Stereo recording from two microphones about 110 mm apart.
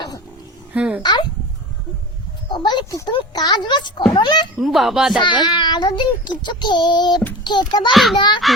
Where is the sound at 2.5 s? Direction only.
45° left (ahead or behind).